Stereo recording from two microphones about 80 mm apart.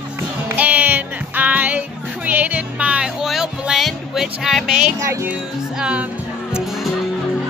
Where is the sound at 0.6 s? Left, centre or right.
Centre.